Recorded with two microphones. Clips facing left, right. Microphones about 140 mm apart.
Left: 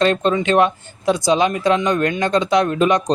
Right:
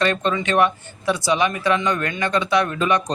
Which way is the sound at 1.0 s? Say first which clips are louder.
Left 4 dB; 20° left (ahead or behind).